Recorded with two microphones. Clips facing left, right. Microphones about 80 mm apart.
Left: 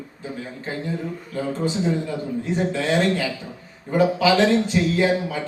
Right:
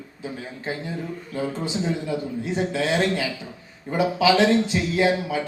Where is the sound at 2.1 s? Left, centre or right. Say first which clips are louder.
Left 1 dB; centre.